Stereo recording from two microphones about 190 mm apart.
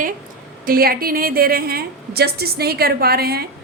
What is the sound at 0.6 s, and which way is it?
A woman's voice, 50° right (ahead or behind).